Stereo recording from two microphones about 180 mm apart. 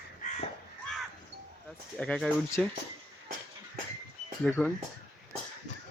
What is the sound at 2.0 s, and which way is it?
Speech, 5° left (ahead or behind).